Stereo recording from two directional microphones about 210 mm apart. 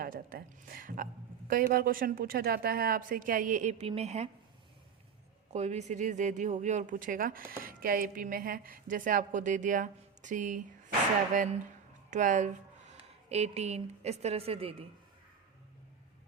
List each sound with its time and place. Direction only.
0.0 s speech: 45° right (ahead or behind)
5.5 s speech: 35° right (ahead or behind)
12.1 s speech: 35° right (ahead or behind)